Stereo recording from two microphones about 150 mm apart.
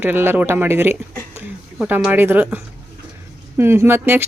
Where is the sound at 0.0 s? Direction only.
15° right (ahead or behind).